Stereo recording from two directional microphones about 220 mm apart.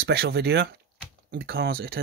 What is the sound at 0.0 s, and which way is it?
Speech, 45° right (ahead or behind).